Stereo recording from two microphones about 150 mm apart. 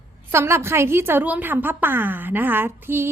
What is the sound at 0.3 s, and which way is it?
A woman's voice, 15° right (ahead or behind).